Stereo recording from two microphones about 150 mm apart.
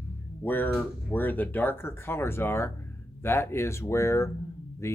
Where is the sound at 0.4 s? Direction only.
15° left (ahead or behind).